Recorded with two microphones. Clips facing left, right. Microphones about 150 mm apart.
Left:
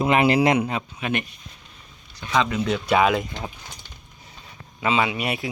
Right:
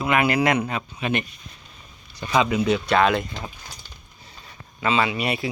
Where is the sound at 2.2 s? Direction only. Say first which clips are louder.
Right 2 dB; 10° right (ahead or behind).